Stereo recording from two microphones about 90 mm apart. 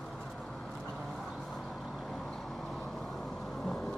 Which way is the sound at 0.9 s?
Centre (ahead or behind).